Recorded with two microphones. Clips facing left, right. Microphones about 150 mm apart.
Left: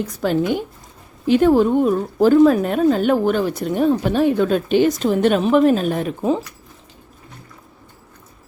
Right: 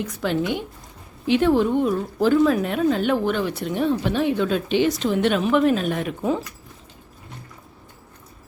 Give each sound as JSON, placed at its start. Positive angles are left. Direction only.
{"t": 0.0, "sound": "a woman's voice", "side_deg": 40}